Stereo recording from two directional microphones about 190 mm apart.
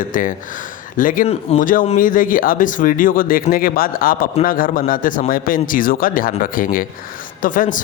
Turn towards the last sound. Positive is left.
turn(degrees=45)  # may be behind; listen again after turning